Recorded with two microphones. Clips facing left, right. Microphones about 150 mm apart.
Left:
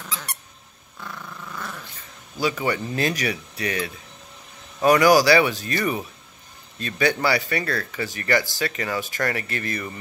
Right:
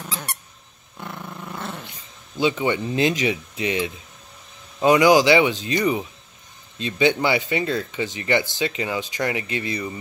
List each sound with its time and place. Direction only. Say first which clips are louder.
0.0 s squeak: right 2 dB; 25° right (ahead or behind)
0.9 s dog: right 3 dB; 30° right (ahead or behind)
2.4 s speech: right 3 dB; 20° right (ahead or behind)